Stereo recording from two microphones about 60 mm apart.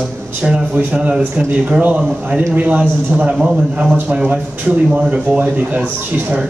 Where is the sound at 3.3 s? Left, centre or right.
Centre.